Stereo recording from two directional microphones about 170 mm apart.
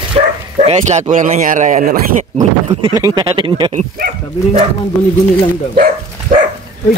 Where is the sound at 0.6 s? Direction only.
40° right (ahead or behind).